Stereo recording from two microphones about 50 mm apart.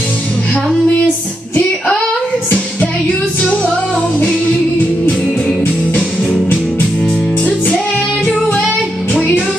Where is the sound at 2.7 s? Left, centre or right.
Left.